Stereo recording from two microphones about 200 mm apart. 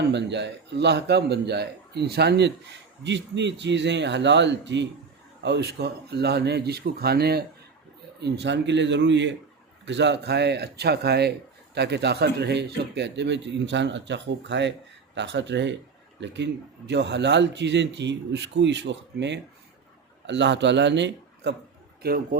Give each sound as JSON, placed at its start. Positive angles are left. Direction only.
{"t": 0.1, "sound": "a man's voice", "side_deg": -60}
{"t": 22.0, "sound": "a man's voice", "side_deg": -50}